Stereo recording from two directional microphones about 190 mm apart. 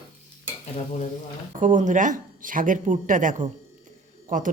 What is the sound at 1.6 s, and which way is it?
Speech, 40° right (ahead or behind).